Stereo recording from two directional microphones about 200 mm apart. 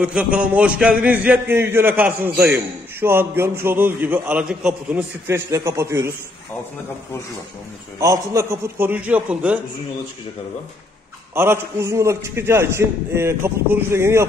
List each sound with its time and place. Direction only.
0.0 s a man's voice: 5° right (ahead or behind)
8.0 s a man's voice: 15° right (ahead or behind)
11.3 s a man's voice: 10° right (ahead or behind)